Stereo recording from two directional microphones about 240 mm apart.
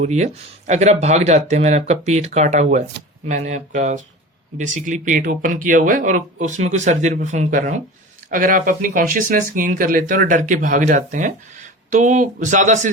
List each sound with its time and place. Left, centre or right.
0.0 s speech: right